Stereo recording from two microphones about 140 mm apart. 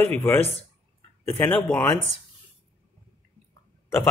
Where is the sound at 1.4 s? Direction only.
10° left (ahead or behind).